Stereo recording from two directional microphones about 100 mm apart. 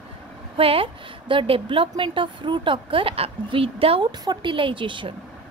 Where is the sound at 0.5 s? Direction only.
70° right (ahead or behind).